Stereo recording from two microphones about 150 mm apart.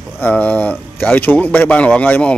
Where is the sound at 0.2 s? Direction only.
10° left (ahead or behind).